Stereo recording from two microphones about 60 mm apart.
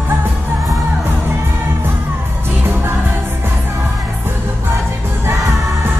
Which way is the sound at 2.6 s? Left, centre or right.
Right.